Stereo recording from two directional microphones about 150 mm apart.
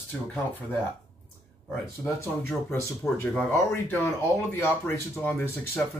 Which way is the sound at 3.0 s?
15° left (ahead or behind).